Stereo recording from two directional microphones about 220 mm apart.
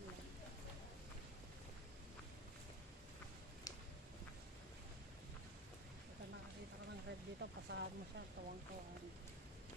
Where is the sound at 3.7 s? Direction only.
15° left (ahead or behind).